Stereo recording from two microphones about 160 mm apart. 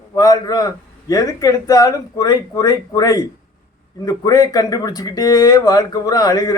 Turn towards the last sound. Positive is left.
turn(degrees=20)  # may be behind; listen again after turning